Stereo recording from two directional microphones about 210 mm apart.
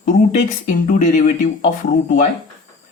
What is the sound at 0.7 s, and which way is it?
Speech, 35° left (ahead or behind).